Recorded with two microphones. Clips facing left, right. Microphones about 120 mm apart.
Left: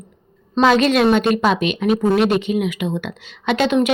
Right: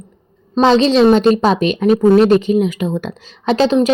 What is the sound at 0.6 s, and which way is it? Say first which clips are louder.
A woman's voice: right 4 dB; 25° right (ahead or behind).